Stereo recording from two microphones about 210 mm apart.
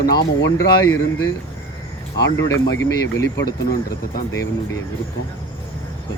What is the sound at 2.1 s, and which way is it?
Speech, 60° left (ahead or behind).